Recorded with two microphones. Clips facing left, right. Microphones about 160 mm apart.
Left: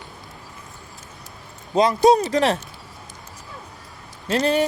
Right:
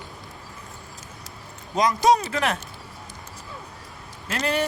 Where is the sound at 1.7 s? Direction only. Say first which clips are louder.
Left 4 dB; 30° left (ahead or behind).